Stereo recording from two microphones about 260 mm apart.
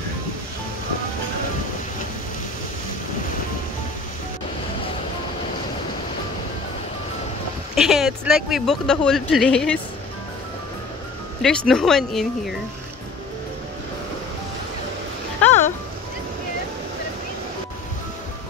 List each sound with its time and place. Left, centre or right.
7.7 s speech: centre
11.4 s speech: centre
15.4 s music: centre